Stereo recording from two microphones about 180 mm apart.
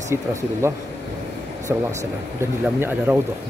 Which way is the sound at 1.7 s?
10° right (ahead or behind).